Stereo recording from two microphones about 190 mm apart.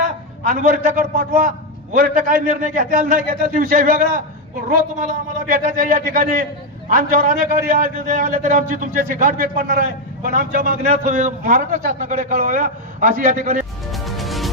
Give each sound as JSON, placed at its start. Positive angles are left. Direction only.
{"t": 0.0, "sound": "a man's voice", "side_deg": -45}
{"t": 5.5, "sound": "a man's voice", "side_deg": -45}
{"t": 13.9, "sound": "music", "side_deg": 0}